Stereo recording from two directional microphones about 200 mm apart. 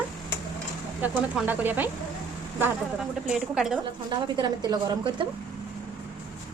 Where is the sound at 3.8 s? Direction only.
20° right (ahead or behind).